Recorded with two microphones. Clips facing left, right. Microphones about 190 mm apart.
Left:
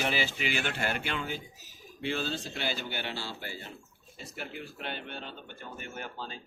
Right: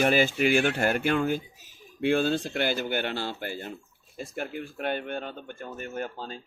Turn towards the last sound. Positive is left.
turn(degrees=-40)  # may be behind; listen again after turning